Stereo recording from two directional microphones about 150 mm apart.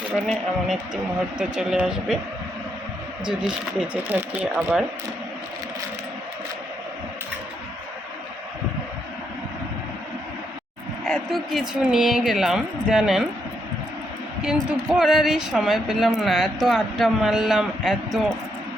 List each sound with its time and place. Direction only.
0.1 s speech: 5° left (ahead or behind)
3.2 s speech: 5° right (ahead or behind)
11.0 s speech: centre (ahead or behind)
14.4 s speech: 5° right (ahead or behind)